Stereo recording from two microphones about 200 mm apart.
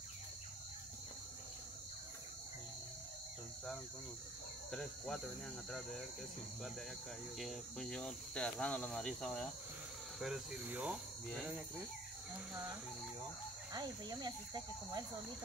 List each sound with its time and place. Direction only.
4.6 s cricket: 5° left (ahead or behind)
7.3 s cricket: centre (ahead or behind)
13.7 s speech: 20° right (ahead or behind)